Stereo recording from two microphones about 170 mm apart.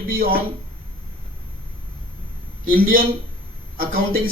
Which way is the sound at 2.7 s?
60° right (ahead or behind).